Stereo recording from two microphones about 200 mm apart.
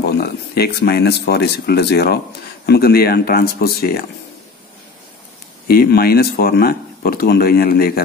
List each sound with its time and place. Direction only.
0.0 s speech: 50° left (ahead or behind)
5.7 s speech: 50° left (ahead or behind)